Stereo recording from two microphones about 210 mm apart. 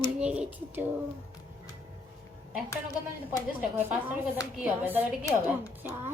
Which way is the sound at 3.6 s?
10° right (ahead or behind).